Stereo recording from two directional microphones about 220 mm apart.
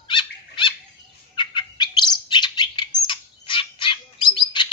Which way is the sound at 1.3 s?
20° left (ahead or behind).